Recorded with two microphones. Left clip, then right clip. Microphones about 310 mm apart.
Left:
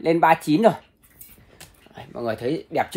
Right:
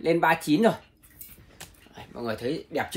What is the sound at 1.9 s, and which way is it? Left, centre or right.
Speech, left.